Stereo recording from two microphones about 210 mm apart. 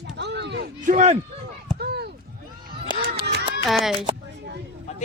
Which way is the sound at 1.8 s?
50° right (ahead or behind).